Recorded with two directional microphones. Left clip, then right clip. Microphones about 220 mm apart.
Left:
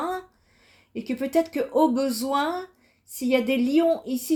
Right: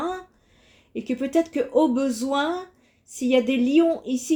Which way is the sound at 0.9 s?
20° left (ahead or behind).